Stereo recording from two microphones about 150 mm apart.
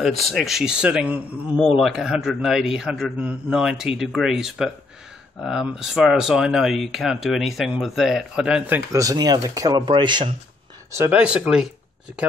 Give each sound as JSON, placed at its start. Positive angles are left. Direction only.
{"t": 0.0, "sound": "speech", "side_deg": 0}
{"t": 9.0, "sound": "speech", "side_deg": -25}
{"t": 10.9, "sound": "speech", "side_deg": -20}
{"t": 11.1, "sound": "speech", "side_deg": -5}